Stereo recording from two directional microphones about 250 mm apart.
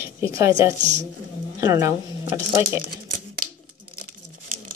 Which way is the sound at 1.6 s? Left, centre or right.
Centre.